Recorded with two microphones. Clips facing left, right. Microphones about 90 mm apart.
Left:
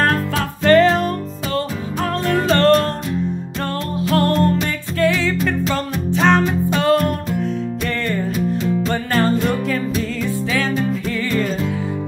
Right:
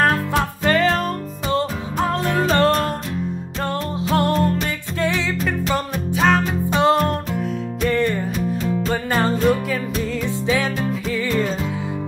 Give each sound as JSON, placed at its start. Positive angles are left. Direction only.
{"t": 0.0, "sound": "music", "side_deg": -10}
{"t": 1.5, "sound": "music", "side_deg": -20}
{"t": 4.1, "sound": "music", "side_deg": -15}
{"t": 5.7, "sound": "music", "side_deg": -5}
{"t": 6.7, "sound": "music", "side_deg": -20}
{"t": 10.2, "sound": "music", "side_deg": -15}